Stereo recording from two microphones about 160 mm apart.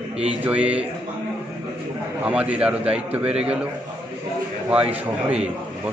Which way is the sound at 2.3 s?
10° right (ahead or behind).